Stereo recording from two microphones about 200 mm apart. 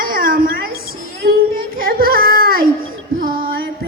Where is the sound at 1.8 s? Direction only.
45° right (ahead or behind).